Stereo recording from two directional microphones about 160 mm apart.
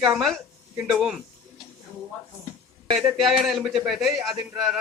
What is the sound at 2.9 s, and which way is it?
A man's voice, centre (ahead or behind).